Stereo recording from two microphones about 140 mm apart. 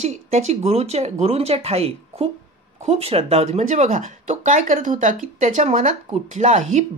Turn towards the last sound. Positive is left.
turn(degrees=-60)  # may be behind; listen again after turning